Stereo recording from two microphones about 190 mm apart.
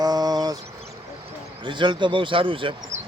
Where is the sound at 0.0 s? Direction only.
20° right (ahead or behind).